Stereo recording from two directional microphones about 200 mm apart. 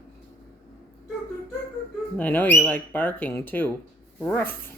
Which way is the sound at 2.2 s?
10° left (ahead or behind).